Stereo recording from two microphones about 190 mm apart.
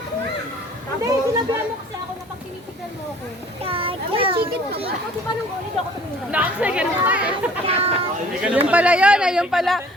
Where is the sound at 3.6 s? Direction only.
30° right (ahead or behind).